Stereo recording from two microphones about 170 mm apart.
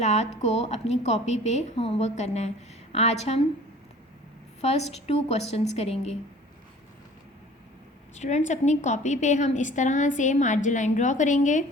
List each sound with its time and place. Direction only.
0.0 s a woman's voice: 40° left (ahead or behind)
4.6 s a woman's voice: 40° left (ahead or behind)
8.1 s a woman's voice: 40° left (ahead or behind)